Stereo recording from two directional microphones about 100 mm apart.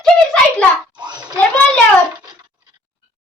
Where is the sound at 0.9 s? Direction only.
50° right (ahead or behind).